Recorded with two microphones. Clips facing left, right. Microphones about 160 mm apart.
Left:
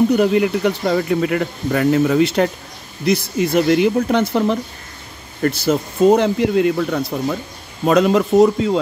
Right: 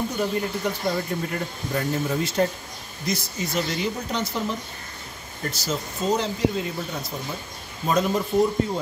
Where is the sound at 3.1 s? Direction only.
60° left (ahead or behind).